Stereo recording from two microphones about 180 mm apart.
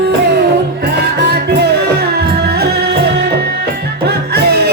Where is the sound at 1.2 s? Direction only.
65° right (ahead or behind).